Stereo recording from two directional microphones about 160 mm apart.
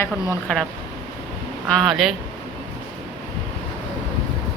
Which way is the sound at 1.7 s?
Centre (ahead or behind).